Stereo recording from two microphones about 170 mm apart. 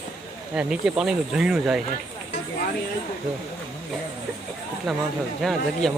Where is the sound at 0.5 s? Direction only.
5° right (ahead or behind).